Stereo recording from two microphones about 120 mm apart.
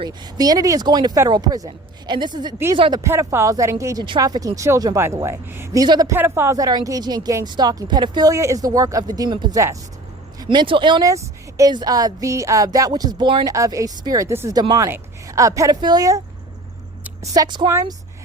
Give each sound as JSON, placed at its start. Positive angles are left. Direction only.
{"t": 0.0, "sound": "speech", "side_deg": -35}
{"t": 3.0, "sound": "speech", "side_deg": -25}
{"t": 5.8, "sound": "speech", "side_deg": -30}
{"t": 6.1, "sound": "speech", "side_deg": -20}
{"t": 8.3, "sound": "speech", "side_deg": -25}
{"t": 11.0, "sound": "a woman's voice", "side_deg": -25}
{"t": 13.5, "sound": "speech", "side_deg": -25}
{"t": 17.3, "sound": "speech", "side_deg": -35}
{"t": 17.7, "sound": "speech", "side_deg": -25}